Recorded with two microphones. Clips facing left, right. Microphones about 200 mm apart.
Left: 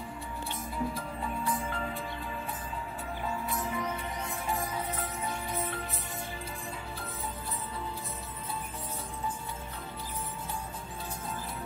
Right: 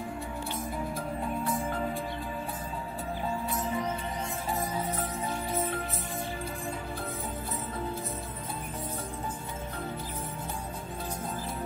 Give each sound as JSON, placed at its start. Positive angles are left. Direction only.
{"t": 3.5, "sound": "music", "side_deg": -30}